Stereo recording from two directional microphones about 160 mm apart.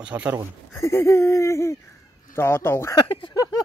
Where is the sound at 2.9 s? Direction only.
30° left (ahead or behind).